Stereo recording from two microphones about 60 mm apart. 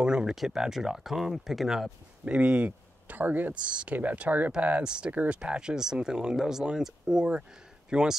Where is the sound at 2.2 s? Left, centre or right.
Centre.